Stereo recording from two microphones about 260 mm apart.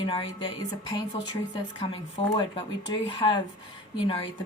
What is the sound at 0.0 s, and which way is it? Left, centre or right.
Music, centre.